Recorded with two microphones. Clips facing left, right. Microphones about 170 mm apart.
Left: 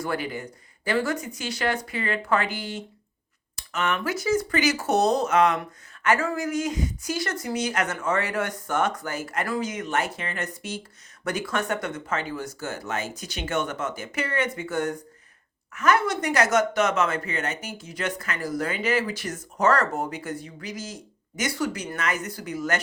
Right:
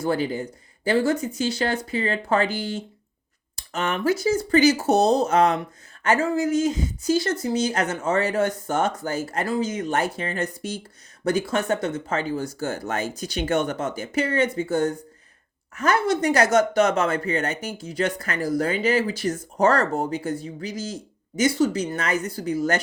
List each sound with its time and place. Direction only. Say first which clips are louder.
0.0 s speech: right 5 dB; 30° right (ahead or behind)